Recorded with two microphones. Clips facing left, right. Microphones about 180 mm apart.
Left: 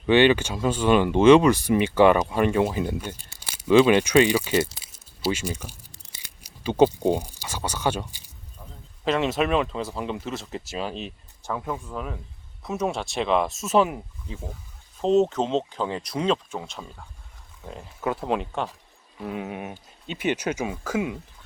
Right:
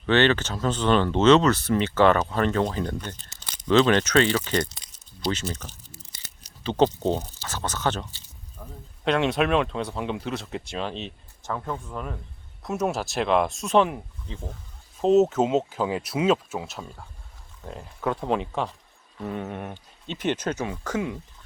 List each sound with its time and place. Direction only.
0.0 s speech: 10° left (ahead or behind)
9.0 s speech: centre (ahead or behind)